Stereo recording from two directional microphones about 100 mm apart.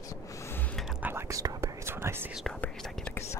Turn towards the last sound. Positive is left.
turn(degrees=15)  # may be behind; listen again after turning